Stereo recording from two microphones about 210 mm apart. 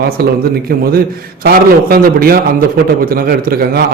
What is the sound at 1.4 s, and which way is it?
A man's voice, 45° right (ahead or behind).